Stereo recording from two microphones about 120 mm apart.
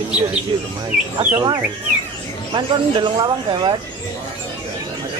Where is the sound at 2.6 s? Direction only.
40° right (ahead or behind).